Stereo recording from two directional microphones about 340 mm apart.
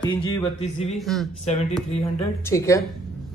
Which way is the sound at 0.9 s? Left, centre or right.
Centre.